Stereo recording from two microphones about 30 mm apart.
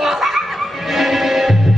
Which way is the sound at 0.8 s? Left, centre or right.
Centre.